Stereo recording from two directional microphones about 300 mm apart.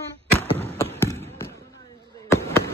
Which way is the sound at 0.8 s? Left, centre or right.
Centre.